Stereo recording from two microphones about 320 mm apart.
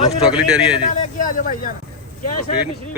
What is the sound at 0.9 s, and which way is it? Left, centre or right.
Speech, left.